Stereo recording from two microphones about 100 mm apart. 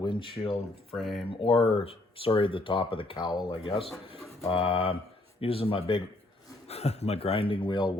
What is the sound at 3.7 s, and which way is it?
Speech, 70° left (ahead or behind).